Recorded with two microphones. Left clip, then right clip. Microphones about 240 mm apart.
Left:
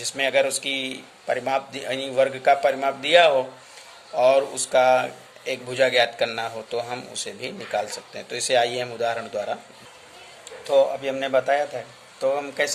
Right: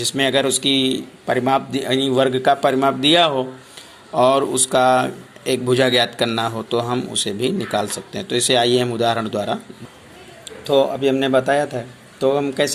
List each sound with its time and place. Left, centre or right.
0.0 s speech: centre
10.6 s speech: centre